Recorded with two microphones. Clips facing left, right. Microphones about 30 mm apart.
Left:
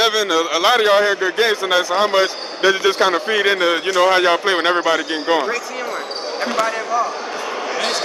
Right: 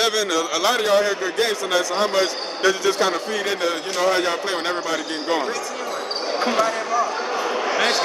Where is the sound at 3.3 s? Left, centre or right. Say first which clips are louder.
Left 7 dB; left.